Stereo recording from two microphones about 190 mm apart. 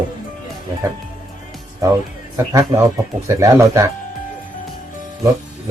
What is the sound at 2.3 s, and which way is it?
A man's voice, 15° right (ahead or behind).